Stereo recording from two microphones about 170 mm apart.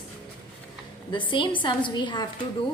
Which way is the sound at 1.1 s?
30° left (ahead or behind).